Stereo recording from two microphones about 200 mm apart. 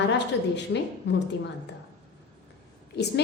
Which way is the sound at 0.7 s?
70° left (ahead or behind).